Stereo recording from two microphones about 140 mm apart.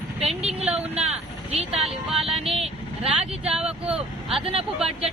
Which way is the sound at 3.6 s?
5° right (ahead or behind).